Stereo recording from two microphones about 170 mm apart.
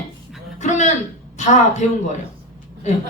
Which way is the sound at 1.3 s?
45° left (ahead or behind).